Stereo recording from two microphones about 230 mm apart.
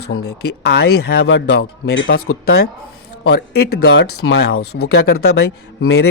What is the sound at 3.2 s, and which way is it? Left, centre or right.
Speech, left.